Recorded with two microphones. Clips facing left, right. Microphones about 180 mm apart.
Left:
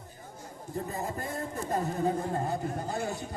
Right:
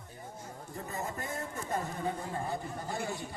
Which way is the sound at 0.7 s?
35° left (ahead or behind).